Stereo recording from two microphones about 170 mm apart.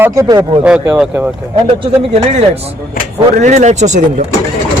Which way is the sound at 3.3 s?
45° right (ahead or behind).